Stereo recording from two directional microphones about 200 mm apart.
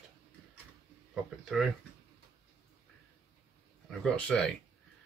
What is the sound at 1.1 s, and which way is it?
Speech, centre (ahead or behind).